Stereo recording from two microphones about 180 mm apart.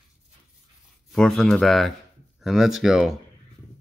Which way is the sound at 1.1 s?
Centre (ahead or behind).